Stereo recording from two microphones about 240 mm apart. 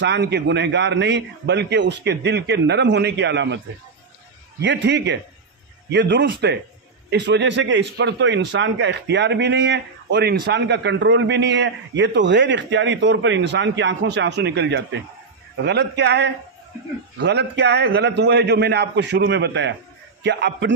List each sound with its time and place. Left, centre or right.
0.0 s a man's voice: right